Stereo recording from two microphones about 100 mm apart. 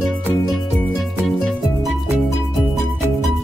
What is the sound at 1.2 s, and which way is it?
Music, centre (ahead or behind).